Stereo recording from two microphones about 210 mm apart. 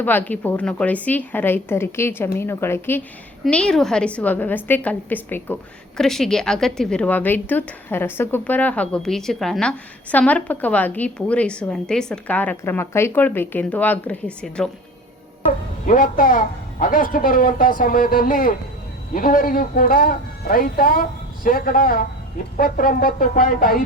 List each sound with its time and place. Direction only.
0.0 s a woman's voice: 10° left (ahead or behind)
15.9 s speech: 40° left (ahead or behind)